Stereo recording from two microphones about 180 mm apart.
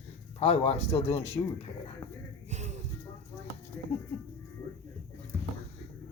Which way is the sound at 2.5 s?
40° right (ahead or behind).